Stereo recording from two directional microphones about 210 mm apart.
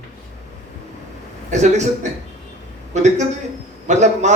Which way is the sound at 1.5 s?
35° right (ahead or behind).